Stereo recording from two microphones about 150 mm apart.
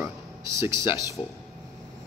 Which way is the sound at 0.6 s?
20° right (ahead or behind).